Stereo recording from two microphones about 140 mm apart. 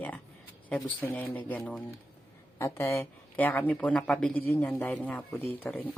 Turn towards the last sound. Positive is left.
turn(degrees=10)  # may be behind; listen again after turning